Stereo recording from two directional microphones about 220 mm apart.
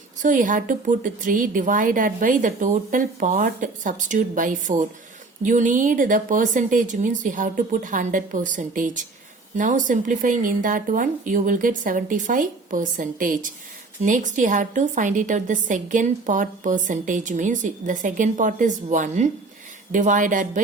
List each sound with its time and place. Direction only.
0.2 s a woman's voice: 35° right (ahead or behind)